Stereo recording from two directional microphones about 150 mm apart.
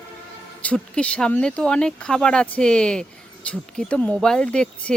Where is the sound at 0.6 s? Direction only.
10° left (ahead or behind).